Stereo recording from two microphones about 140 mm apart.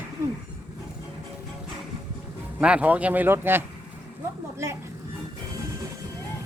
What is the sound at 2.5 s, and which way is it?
Speech, 10° right (ahead or behind).